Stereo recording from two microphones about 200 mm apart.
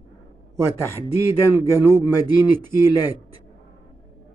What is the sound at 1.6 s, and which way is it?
Speech, 10° right (ahead or behind).